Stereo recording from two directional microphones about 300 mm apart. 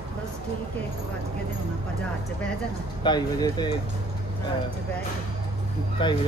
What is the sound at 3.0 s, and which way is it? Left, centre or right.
Speech, centre.